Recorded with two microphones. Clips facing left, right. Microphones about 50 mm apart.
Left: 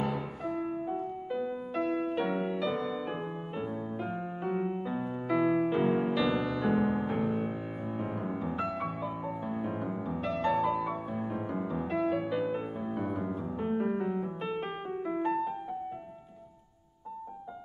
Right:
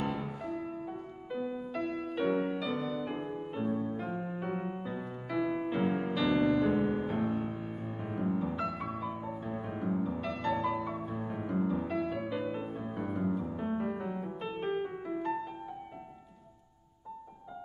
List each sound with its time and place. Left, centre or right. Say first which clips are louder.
0.4 s music: left 4 dB; centre
4.9 s music: left 5 dB; centre
5.7 s music: left 4 dB; centre